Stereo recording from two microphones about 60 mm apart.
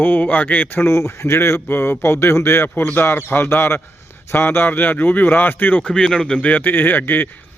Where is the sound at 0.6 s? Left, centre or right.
Left.